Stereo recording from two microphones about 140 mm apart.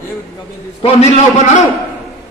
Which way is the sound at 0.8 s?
45° left (ahead or behind).